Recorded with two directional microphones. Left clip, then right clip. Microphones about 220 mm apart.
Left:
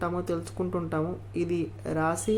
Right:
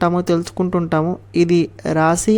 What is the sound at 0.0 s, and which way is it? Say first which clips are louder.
Speech: right 13 dB; 40° right (ahead or behind).